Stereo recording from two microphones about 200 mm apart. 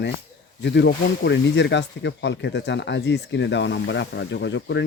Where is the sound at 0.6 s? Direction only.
60° left (ahead or behind).